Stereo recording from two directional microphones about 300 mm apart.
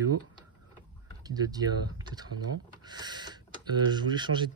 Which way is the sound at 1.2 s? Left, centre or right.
Centre.